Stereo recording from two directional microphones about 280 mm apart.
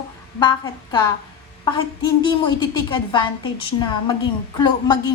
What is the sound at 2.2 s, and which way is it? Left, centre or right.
A woman's voice, centre.